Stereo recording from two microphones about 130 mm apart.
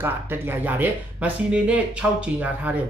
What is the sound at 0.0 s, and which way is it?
Speech, 15° right (ahead or behind).